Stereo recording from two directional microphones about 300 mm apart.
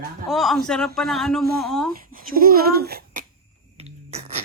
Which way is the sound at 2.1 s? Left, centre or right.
Right.